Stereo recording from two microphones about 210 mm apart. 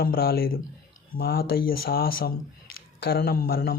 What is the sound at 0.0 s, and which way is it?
Speech, 45° left (ahead or behind).